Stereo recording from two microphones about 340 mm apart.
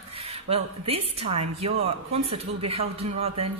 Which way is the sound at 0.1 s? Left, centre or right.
Centre.